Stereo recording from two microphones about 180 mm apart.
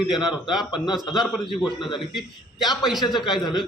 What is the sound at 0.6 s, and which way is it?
Speech, 25° left (ahead or behind).